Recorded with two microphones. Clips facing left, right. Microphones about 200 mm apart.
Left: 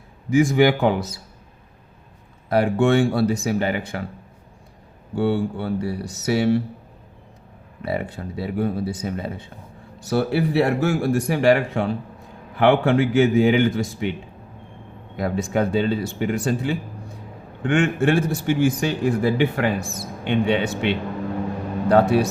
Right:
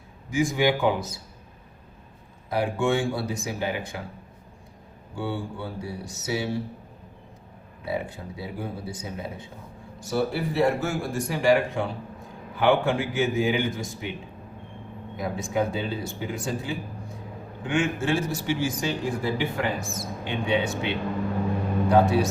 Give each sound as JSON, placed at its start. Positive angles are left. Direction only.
{"t": 0.3, "sound": "speech", "side_deg": 70}
{"t": 2.5, "sound": "speech", "side_deg": 70}
{"t": 5.1, "sound": "speech", "side_deg": 70}
{"t": 7.8, "sound": "speech", "side_deg": 70}
{"t": 15.1, "sound": "a man's voice", "side_deg": 70}